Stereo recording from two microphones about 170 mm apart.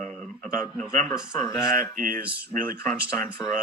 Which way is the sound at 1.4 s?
20° left (ahead or behind).